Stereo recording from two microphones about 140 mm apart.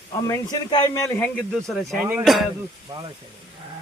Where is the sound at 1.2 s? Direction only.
Centre (ahead or behind).